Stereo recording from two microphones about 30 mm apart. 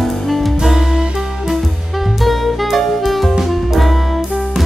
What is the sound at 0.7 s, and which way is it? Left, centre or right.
Music, centre.